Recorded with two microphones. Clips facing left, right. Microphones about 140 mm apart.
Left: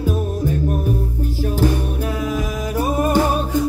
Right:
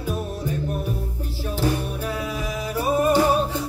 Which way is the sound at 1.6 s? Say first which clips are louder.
Left 3 dB; 45° left (ahead or behind).